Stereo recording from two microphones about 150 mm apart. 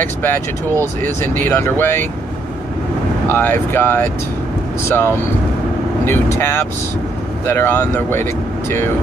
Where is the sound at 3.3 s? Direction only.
15° left (ahead or behind).